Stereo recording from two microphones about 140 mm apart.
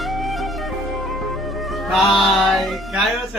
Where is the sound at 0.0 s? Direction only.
Centre (ahead or behind).